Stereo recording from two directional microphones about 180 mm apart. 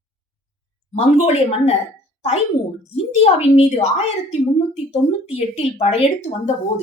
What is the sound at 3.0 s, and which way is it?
Speech, 35° left (ahead or behind).